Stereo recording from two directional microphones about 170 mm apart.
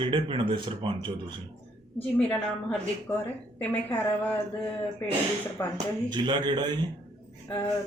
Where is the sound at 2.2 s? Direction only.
5° left (ahead or behind).